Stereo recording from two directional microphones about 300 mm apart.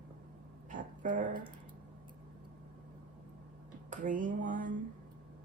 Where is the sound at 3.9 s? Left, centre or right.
Right.